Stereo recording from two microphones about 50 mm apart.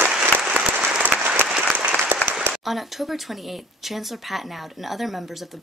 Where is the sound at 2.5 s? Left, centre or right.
Centre.